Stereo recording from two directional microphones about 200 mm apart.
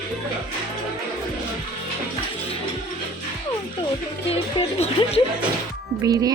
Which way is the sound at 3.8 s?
30° left (ahead or behind).